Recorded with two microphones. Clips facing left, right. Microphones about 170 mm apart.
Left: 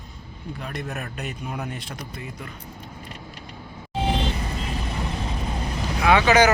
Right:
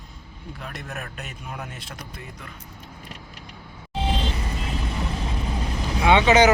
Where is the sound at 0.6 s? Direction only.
Centre (ahead or behind).